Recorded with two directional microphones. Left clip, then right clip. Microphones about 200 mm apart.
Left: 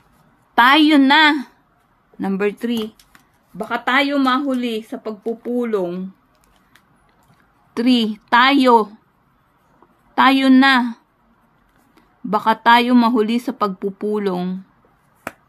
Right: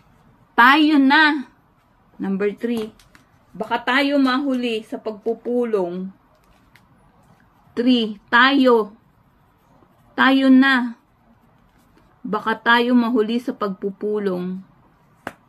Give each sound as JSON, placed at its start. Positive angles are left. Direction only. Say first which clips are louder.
{"t": 0.6, "sound": "a woman's voice", "louder": "left 1 dB", "side_deg": 50}
{"t": 7.7, "sound": "speech", "louder": "left 1 dB", "side_deg": 50}
{"t": 10.1, "sound": "speech", "louder": "left 2 dB", "side_deg": 50}
{"t": 12.3, "sound": "speech", "louder": "left 5 dB", "side_deg": 50}